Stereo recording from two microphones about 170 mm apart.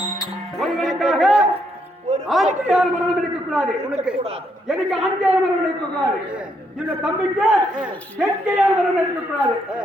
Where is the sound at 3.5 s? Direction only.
5° right (ahead or behind).